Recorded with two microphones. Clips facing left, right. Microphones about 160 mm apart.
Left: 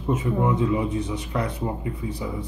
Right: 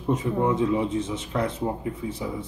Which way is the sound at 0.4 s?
20° right (ahead or behind).